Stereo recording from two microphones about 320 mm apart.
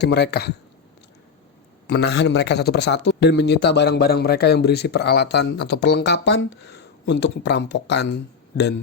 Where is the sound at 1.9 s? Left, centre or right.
Left.